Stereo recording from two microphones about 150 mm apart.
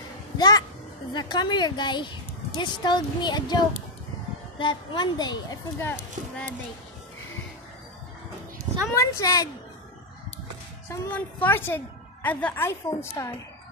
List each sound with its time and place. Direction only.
0.4 s a child's voice: 25° left (ahead or behind)
5.8 s a woman's voice: 10° left (ahead or behind)
8.7 s a sound: 50° right (ahead or behind)
9.1 s a woman's voice: 20° left (ahead or behind)
10.9 s a woman's voice: 10° left (ahead or behind)